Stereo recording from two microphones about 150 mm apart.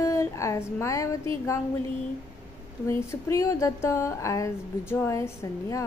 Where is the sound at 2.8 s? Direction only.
20° left (ahead or behind).